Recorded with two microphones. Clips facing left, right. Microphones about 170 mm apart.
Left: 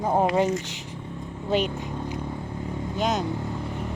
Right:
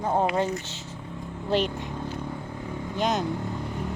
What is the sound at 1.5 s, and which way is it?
Speech, centre (ahead or behind).